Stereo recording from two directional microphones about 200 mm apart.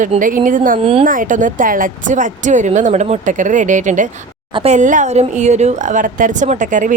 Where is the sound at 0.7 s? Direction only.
30° right (ahead or behind).